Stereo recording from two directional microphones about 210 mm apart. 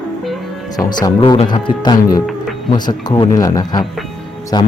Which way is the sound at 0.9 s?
20° left (ahead or behind).